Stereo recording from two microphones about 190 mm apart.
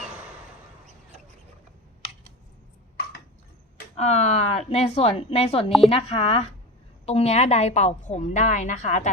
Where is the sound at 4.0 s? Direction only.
35° left (ahead or behind).